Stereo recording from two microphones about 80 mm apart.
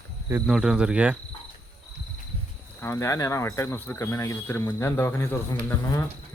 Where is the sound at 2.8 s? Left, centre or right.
Left.